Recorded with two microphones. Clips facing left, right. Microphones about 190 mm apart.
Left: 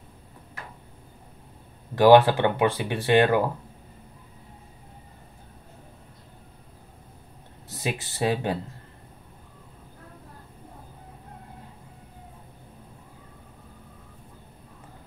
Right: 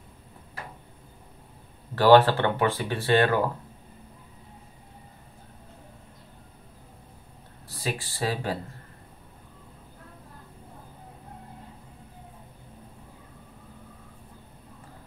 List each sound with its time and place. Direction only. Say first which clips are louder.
2.0 s speech: left 2 dB; 15° left (ahead or behind)
7.6 s speech: left 2 dB; 20° left (ahead or behind)